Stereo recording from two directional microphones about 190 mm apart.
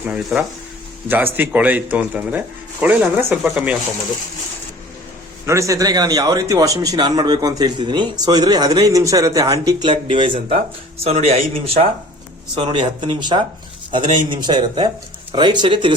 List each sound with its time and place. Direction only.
0.1 s speech: 5° right (ahead or behind)
5.5 s speech: 15° right (ahead or behind)